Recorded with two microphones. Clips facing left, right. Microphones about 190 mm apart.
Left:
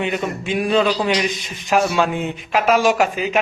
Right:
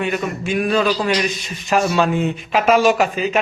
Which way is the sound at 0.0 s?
20° left (ahead or behind).